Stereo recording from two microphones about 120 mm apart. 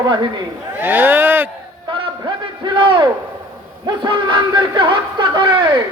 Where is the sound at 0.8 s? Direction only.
15° right (ahead or behind).